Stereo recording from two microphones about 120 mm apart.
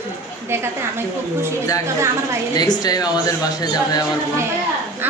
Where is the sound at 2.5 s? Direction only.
35° left (ahead or behind).